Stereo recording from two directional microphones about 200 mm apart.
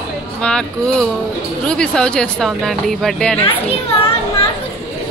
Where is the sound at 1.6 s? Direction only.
5° left (ahead or behind).